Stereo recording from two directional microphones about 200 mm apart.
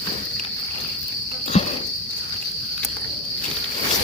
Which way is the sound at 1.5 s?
30° left (ahead or behind).